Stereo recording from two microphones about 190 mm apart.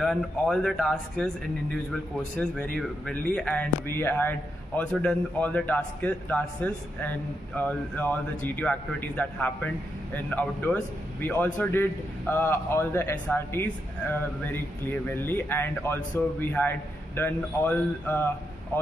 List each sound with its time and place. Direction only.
0.0 s a man's voice: 5° left (ahead or behind)